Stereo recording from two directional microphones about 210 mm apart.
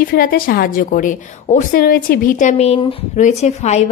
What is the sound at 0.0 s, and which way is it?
A woman's voice, 45° left (ahead or behind).